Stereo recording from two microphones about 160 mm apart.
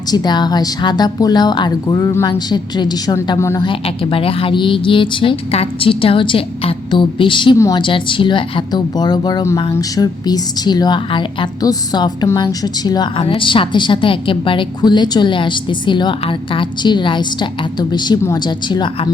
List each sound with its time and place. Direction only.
0.1 s a woman's voice: 25° left (ahead or behind)
3.7 s a woman's voice: 35° left (ahead or behind)